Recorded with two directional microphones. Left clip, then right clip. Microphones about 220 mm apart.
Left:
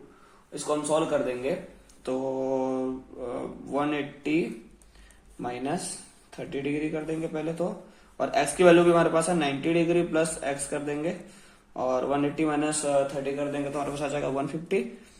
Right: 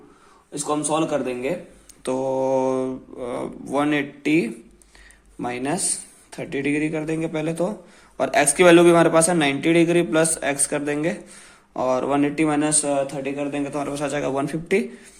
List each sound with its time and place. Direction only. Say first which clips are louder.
0.5 s a man's voice: right 3 dB; 45° right (ahead or behind)